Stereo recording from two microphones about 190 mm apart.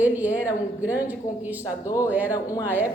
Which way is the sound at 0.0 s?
10° right (ahead or behind).